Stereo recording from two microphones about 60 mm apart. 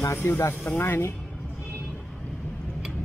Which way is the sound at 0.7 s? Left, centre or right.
Left.